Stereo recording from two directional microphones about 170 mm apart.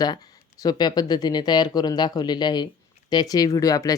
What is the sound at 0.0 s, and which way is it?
Speech, 20° left (ahead or behind).